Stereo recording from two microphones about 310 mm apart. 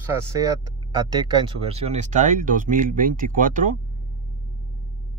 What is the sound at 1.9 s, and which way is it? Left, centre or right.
Speech, right.